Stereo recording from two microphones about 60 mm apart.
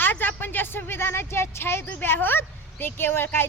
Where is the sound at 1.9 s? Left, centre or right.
Left.